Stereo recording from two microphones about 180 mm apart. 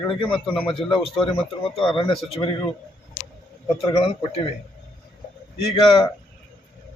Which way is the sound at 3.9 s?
35° left (ahead or behind).